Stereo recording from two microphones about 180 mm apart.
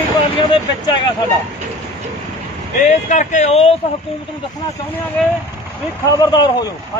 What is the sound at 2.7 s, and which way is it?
Speech, 40° left (ahead or behind).